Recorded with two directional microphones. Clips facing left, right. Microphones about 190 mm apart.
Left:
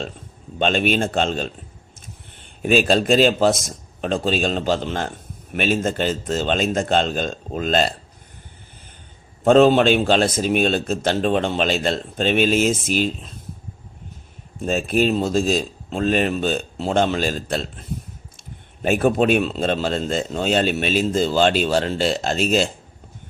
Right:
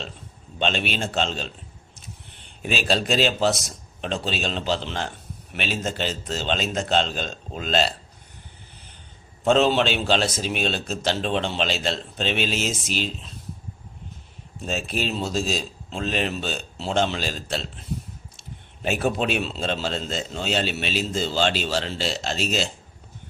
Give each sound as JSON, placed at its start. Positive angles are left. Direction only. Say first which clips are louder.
{"t": 0.6, "sound": "a man's voice", "louder": "left 6 dB", "side_deg": 50}
{"t": 2.6, "sound": "a man's voice", "louder": "left 7 dB", "side_deg": 50}
{"t": 9.4, "sound": "a man's voice", "louder": "left 6 dB", "side_deg": 50}
{"t": 14.6, "sound": "a man's voice", "louder": "left 8 dB", "side_deg": 50}
{"t": 18.8, "sound": "a man's voice", "louder": "left 6 dB", "side_deg": 50}